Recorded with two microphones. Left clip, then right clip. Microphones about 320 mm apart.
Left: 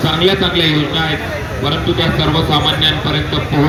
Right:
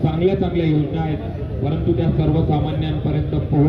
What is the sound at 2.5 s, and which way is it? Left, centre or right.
A man's voice, left.